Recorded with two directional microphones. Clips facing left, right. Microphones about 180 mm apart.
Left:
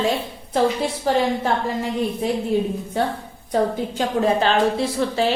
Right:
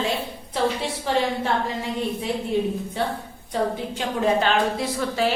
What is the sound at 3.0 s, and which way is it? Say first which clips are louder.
A woman's voice: left 3 dB; 45° left (ahead or behind).